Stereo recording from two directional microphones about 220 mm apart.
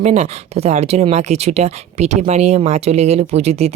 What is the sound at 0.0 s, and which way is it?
Speech, 30° right (ahead or behind).